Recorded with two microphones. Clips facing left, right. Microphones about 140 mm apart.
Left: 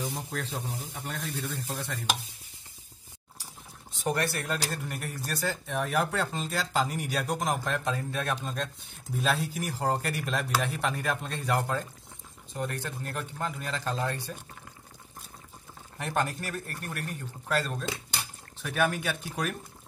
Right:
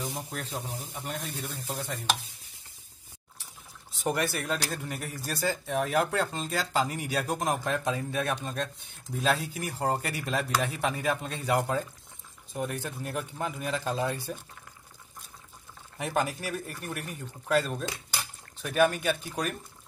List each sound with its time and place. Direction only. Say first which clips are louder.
0.1 s speech: left 1 dB; 10° right (ahead or behind)
1.4 s speech: left 1 dB; 15° right (ahead or behind)
3.9 s speech: even; centre (ahead or behind)
16.0 s speech: right 1 dB; 5° right (ahead or behind)